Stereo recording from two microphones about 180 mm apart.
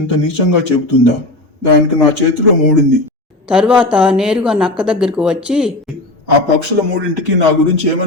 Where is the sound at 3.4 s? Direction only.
5° right (ahead or behind).